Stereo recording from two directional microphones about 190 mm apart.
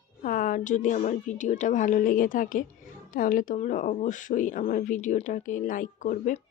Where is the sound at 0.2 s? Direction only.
45° left (ahead or behind).